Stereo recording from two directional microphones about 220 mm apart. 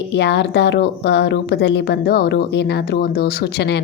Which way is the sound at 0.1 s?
50° left (ahead or behind).